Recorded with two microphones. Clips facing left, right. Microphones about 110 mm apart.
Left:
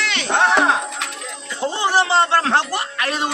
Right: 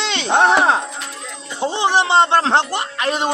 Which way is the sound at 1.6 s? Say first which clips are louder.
Right 1 dB; 20° right (ahead or behind).